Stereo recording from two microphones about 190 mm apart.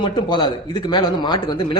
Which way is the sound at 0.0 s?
25° left (ahead or behind).